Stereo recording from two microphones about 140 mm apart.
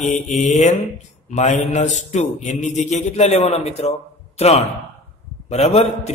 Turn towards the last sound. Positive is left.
turn(degrees=50)  # may be behind; listen again after turning